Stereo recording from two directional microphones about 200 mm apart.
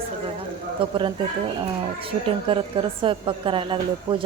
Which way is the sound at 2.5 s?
25° right (ahead or behind).